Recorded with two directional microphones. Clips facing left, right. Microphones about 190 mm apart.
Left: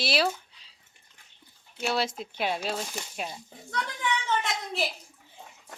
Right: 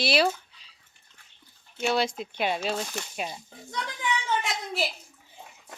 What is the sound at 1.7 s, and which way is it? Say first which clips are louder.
Speech: right 3 dB; centre (ahead or behind).